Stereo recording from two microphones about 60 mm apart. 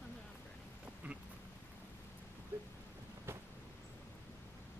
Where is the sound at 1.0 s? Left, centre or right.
Right.